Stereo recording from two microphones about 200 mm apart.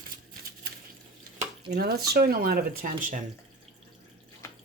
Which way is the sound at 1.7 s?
50° right (ahead or behind).